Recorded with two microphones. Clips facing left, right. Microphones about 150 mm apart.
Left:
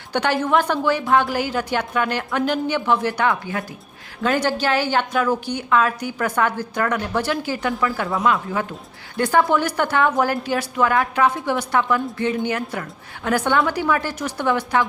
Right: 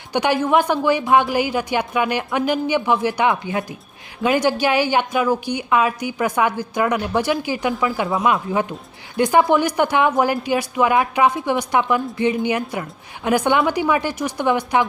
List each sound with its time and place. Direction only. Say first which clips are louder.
0.1 s a woman's voice: right 2 dB; 15° right (ahead or behind)